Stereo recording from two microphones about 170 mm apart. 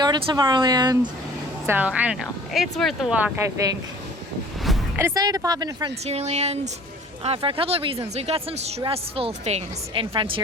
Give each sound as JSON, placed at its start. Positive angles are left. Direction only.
{"t": 0.0, "sound": "speech", "side_deg": -25}
{"t": 1.6, "sound": "speech", "side_deg": -10}
{"t": 4.9, "sound": "speech", "side_deg": -20}
{"t": 6.1, "sound": "a woman's voice", "side_deg": -40}